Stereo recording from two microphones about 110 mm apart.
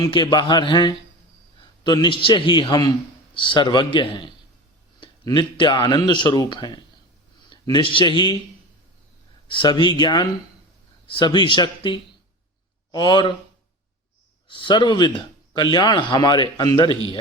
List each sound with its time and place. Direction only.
0.1 s a man's voice: 45° left (ahead or behind)
5.3 s a man's voice: 45° left (ahead or behind)
9.5 s speech: 45° left (ahead or behind)
14.4 s a man's voice: 50° left (ahead or behind)